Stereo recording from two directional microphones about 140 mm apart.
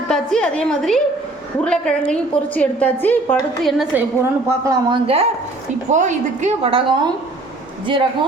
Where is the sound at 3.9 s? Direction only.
20° right (ahead or behind); by 5.3 s 45° right (ahead or behind).